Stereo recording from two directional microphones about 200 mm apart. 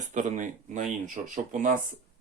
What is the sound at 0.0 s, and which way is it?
Speech, 40° right (ahead or behind).